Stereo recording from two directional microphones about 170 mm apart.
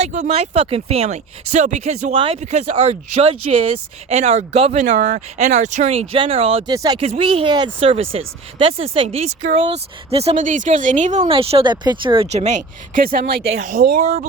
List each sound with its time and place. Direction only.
0.0 s speech: 45° right (ahead or behind)
6.7 s speech: 25° right (ahead or behind)
7.0 s speech: 35° right (ahead or behind); by 13.6 s 85° right
13.6 s speech: 50° right (ahead or behind)